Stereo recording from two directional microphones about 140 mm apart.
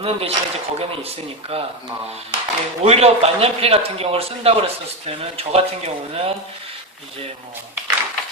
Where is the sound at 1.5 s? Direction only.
45° right (ahead or behind).